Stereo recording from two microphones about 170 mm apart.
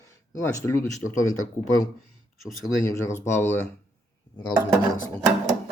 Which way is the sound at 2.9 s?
15° left (ahead or behind).